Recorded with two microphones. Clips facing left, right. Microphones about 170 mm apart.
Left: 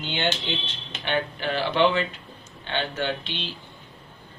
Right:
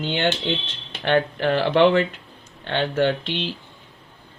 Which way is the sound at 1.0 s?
80° right.